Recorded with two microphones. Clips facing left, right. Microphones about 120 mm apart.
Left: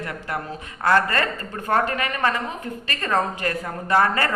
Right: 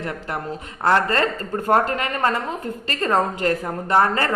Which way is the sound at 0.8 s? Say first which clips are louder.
Right 1 dB; 25° right (ahead or behind).